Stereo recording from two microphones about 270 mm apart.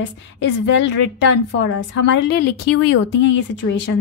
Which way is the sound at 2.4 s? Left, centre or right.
Left.